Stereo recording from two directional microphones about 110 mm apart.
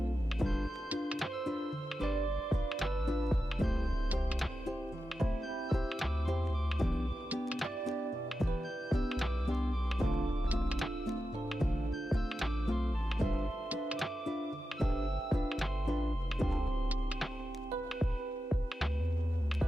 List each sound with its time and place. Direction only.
0.9 s music: 5° right (ahead or behind)
5.2 s music: centre (ahead or behind)
11.6 s music: centre (ahead or behind)
18.0 s music: 5° right (ahead or behind)